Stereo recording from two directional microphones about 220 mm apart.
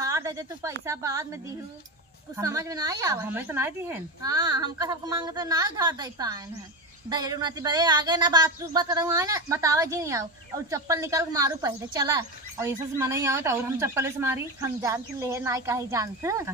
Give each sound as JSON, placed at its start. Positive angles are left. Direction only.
{"t": 0.0, "sound": "a woman's voice", "side_deg": -15}
{"t": 2.4, "sound": "speech", "side_deg": -15}